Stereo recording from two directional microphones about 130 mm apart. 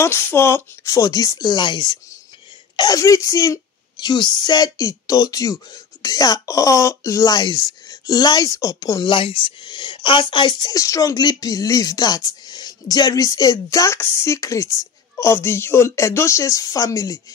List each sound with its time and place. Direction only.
0.0 s speech: 20° left (ahead or behind)
9.1 s speech: 40° left (ahead or behind)